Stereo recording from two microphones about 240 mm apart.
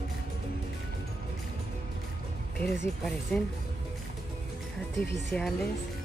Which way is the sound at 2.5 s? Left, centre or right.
Left.